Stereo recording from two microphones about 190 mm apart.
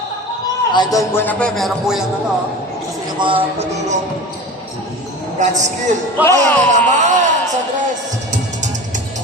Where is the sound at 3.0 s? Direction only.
25° right (ahead or behind).